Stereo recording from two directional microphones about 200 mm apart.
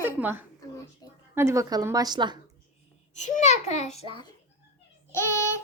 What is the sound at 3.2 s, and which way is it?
A child's voice, 35° left (ahead or behind).